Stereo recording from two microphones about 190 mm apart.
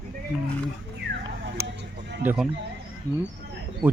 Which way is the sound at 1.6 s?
65° right (ahead or behind).